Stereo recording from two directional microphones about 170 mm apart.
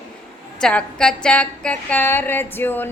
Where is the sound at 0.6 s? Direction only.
5° left (ahead or behind).